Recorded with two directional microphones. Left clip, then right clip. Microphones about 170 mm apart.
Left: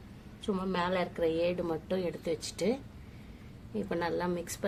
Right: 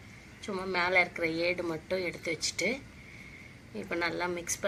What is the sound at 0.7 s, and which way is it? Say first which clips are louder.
A woman's voice: right 7 dB; 40° left (ahead or behind).